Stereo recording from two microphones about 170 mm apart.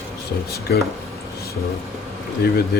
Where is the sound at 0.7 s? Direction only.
75° left (ahead or behind).